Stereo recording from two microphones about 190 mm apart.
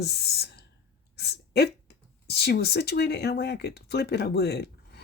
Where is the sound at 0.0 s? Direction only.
60° left (ahead or behind).